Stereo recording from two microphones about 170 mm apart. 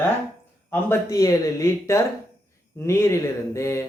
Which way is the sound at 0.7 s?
15° left (ahead or behind).